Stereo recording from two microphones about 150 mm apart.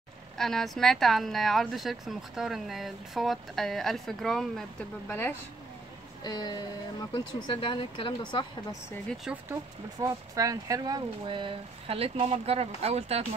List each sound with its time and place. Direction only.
0.4 s speech: 5° left (ahead or behind)
5.0 s speech: 15° left (ahead or behind)
6.2 s speech: 25° left (ahead or behind)
9.3 s speech: 5° right (ahead or behind)
10.0 s speech: 25° right (ahead or behind); by 13.2 s 45° right (ahead or behind)